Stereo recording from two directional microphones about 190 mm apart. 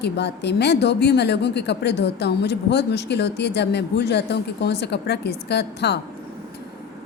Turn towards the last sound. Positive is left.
turn(degrees=60)  # may be behind; listen again after turning